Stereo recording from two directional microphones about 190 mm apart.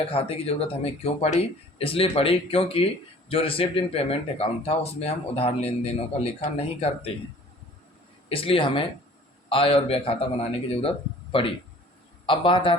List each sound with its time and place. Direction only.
0.0 s speech: 30° left (ahead or behind)
8.3 s a man's voice: 30° left (ahead or behind)